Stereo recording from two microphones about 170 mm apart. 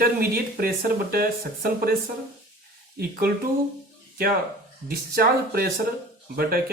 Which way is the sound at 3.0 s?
60° right (ahead or behind).